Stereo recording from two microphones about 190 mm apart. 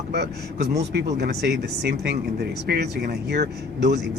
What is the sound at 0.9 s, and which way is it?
Speech, 60° right (ahead or behind).